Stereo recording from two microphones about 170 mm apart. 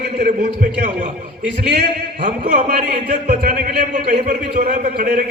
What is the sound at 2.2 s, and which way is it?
A man's voice, 45° right (ahead or behind).